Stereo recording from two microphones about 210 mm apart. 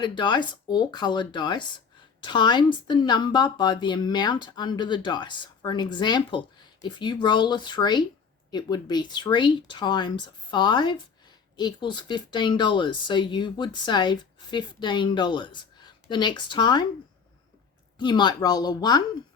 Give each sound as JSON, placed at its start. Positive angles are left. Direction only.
{"t": 0.0, "sound": "speech", "side_deg": 20}
{"t": 17.9, "sound": "speech", "side_deg": 20}